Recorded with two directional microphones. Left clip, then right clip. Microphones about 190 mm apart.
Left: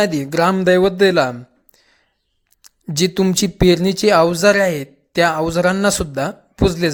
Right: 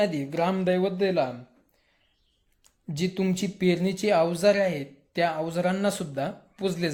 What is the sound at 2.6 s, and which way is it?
A man's voice, 45° left (ahead or behind).